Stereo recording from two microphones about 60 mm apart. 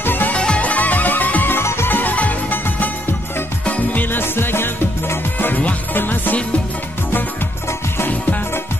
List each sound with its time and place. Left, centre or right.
0.0 s music: left
0.3 s music: centre
1.6 s music: left
3.6 s music: left
5.9 s music: left
8.0 s music: left